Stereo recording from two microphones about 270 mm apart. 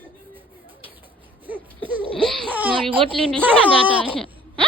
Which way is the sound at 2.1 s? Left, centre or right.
Centre.